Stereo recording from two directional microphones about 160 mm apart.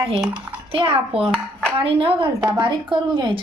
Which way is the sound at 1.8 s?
35° right (ahead or behind).